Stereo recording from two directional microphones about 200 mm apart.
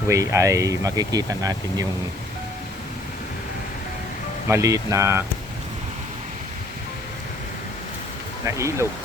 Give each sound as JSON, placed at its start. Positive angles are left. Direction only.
{"t": 0.1, "sound": "speech", "side_deg": -15}
{"t": 4.4, "sound": "speech", "side_deg": -15}
{"t": 8.4, "sound": "speech", "side_deg": -15}